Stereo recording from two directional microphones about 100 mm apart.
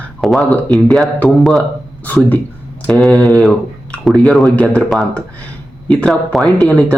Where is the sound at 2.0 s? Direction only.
15° left (ahead or behind).